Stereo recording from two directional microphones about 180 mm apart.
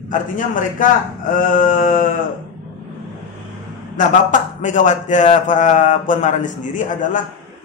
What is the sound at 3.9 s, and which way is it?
A man's voice, 45° left (ahead or behind).